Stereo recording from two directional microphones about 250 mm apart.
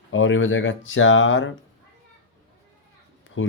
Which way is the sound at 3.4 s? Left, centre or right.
Left.